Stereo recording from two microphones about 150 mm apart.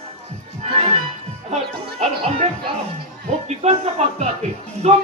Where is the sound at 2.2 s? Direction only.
35° right (ahead or behind).